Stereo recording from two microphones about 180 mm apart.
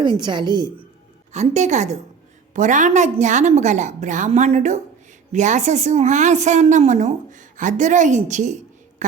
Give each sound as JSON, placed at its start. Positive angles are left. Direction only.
{"t": 0.2, "sound": "a woman's voice", "side_deg": -25}
{"t": 1.3, "sound": "a woman's voice", "side_deg": -40}
{"t": 9.0, "sound": "a sound", "side_deg": -40}